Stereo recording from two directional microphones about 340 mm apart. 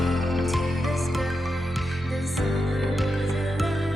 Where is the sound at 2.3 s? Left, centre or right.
Centre.